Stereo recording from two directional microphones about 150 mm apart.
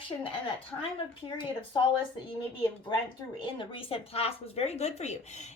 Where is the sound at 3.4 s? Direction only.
35° left (ahead or behind).